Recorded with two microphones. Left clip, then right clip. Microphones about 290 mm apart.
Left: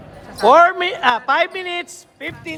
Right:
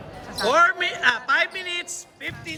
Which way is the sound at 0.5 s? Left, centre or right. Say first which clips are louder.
Left 6 dB; centre.